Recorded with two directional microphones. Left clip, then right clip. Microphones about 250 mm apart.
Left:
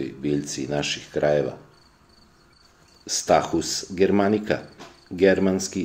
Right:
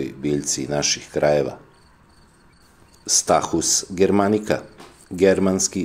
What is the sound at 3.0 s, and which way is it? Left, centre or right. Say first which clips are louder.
Speech: right 2 dB; right.